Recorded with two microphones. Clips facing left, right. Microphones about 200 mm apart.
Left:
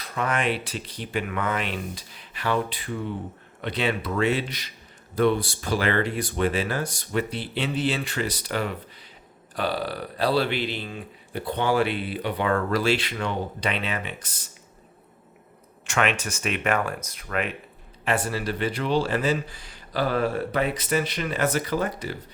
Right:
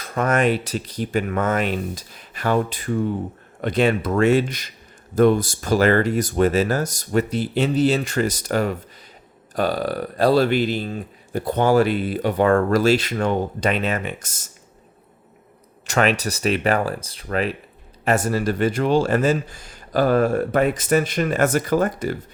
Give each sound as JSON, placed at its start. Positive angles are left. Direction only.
{"t": 0.0, "sound": "speech", "side_deg": -45}
{"t": 15.9, "sound": "speech", "side_deg": -40}